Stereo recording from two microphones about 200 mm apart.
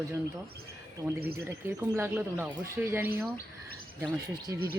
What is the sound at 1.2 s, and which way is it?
Speech, 50° right (ahead or behind).